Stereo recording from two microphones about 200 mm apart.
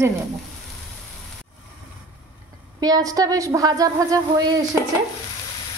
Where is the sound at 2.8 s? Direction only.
20° right (ahead or behind).